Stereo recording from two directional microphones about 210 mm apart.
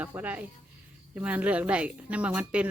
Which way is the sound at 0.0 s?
10° right (ahead or behind).